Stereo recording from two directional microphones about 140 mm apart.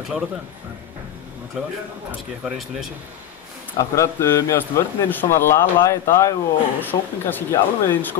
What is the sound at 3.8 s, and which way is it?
Speech, 20° left (ahead or behind).